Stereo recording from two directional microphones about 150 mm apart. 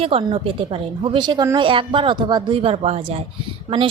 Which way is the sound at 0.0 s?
35° right (ahead or behind).